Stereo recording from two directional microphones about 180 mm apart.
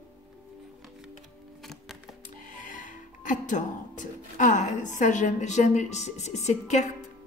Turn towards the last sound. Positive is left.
turn(degrees=40)  # may be behind; listen again after turning